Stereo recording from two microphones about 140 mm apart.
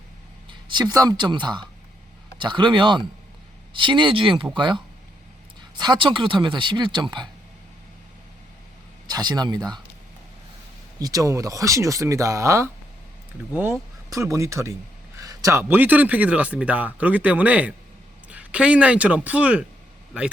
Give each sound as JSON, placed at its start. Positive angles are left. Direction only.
{"t": 0.7, "sound": "speech", "side_deg": -30}
{"t": 9.0, "sound": "speech", "side_deg": -30}
{"t": 11.0, "sound": "speech", "side_deg": -25}